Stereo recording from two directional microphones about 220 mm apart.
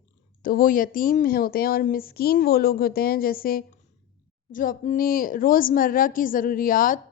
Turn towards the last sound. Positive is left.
turn(degrees=40)  # may be behind; listen again after turning